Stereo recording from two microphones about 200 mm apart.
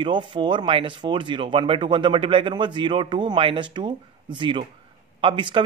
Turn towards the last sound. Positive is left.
turn(degrees=-25)  # may be behind; listen again after turning